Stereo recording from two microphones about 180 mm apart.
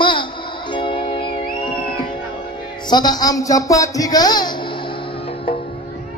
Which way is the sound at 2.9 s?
25° left (ahead or behind).